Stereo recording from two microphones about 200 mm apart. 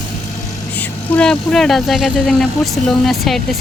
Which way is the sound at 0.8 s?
5° left (ahead or behind).